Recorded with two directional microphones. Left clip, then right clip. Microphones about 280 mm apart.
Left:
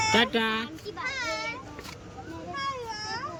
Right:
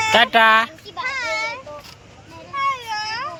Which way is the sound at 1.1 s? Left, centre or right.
Centre.